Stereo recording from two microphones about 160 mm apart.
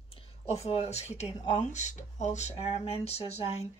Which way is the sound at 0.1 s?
40° left (ahead or behind).